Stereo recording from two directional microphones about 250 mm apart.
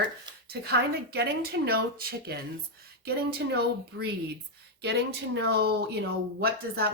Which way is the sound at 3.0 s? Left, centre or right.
Right.